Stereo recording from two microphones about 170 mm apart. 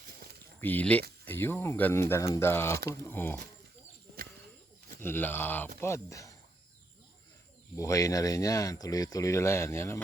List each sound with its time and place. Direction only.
0.6 s speech: 10° left (ahead or behind)
4.9 s speech: 15° left (ahead or behind)
7.8 s speech: 20° left (ahead or behind)